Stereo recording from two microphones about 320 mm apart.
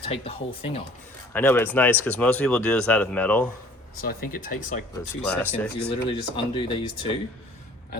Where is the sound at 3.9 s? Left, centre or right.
Left.